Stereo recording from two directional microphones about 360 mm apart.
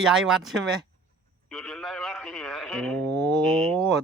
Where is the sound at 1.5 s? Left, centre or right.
Centre.